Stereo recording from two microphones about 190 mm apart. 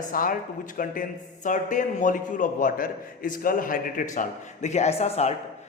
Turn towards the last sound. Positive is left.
turn(degrees=35)  # may be behind; listen again after turning